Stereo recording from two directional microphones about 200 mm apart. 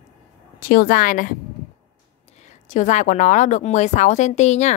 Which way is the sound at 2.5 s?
40° left (ahead or behind).